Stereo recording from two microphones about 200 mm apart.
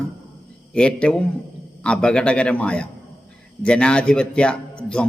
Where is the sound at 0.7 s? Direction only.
5° left (ahead or behind).